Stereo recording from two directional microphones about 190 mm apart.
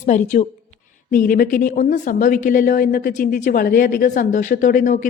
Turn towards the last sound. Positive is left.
turn(degrees=45)  # may be behind; listen again after turning